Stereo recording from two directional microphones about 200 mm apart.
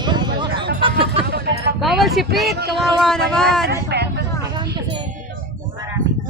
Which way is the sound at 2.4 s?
50° right (ahead or behind).